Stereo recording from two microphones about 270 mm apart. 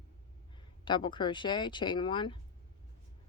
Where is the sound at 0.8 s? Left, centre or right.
Centre.